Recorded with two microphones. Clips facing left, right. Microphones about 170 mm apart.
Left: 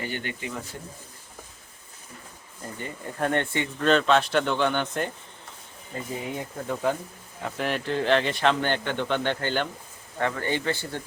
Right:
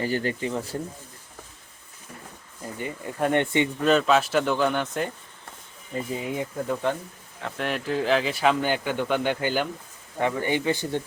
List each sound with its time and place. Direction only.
0.0 s speech: 35° right (ahead or behind)
2.7 s speech: 10° right (ahead or behind)
3.8 s speech: 5° right (ahead or behind)
6.3 s speech: centre (ahead or behind)